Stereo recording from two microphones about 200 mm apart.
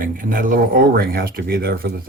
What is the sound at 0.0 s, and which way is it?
Speech, 45° right (ahead or behind).